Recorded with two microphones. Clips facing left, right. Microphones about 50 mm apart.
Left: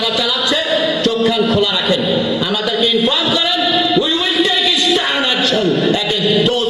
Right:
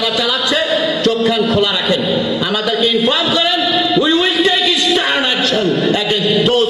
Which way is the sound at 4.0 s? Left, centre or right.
Right.